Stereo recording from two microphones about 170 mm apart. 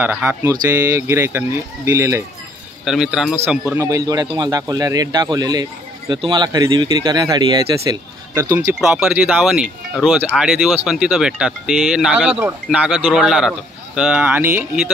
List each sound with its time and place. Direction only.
0.0 s speech: 10° right (ahead or behind)
2.8 s speech: centre (ahead or behind)
3.6 s a man's voice: 15° right (ahead or behind)
8.8 s speech: 5° right (ahead or behind)